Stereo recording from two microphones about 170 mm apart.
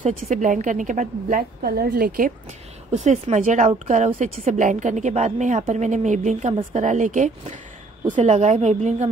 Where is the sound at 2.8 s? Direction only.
45° right (ahead or behind).